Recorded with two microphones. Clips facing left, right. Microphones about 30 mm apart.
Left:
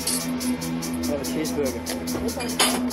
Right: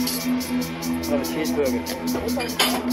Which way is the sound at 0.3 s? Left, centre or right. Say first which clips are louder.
Right 2 dB; centre.